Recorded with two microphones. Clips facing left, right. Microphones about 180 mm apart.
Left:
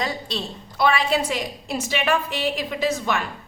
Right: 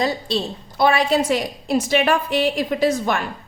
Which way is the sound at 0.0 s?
35° right (ahead or behind).